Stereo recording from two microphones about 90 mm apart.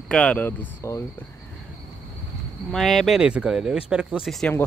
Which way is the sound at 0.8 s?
35° left (ahead or behind).